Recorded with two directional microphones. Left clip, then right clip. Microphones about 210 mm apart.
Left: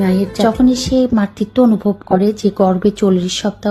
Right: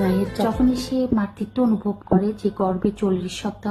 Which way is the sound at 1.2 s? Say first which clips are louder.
Left 9 dB; 30° left (ahead or behind).